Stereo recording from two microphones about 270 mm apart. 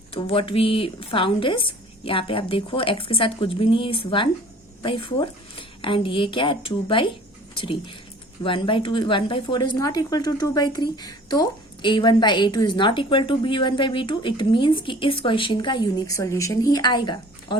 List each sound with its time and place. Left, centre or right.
0.1 s a woman's voice: left